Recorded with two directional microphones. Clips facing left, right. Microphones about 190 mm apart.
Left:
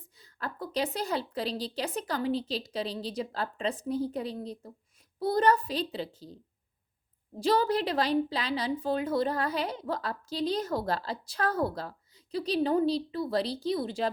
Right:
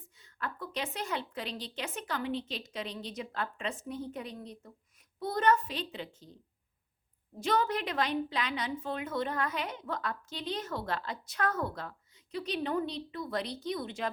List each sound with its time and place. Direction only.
0.2 s a woman's voice: 35° left (ahead or behind)